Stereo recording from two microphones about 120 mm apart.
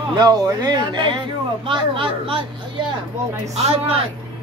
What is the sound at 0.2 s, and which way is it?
Speech, 35° right (ahead or behind).